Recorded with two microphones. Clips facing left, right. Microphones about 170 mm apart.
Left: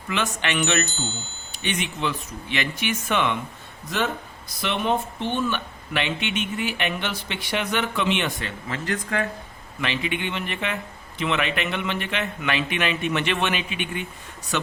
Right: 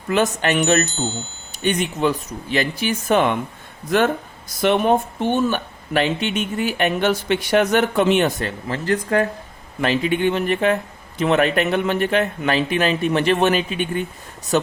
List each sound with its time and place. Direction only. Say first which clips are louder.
0.1 s speech: right 8 dB; 40° right (ahead or behind)
3.8 s speech: right 8 dB; 50° right (ahead or behind)